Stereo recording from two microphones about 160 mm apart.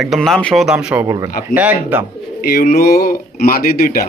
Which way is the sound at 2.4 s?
70° left (ahead or behind).